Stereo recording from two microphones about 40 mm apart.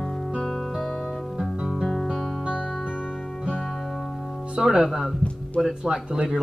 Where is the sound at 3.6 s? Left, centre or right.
Centre.